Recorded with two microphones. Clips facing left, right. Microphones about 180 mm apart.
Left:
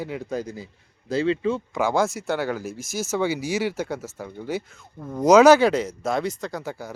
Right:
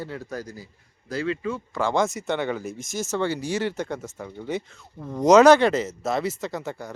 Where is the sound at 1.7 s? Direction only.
5° left (ahead or behind).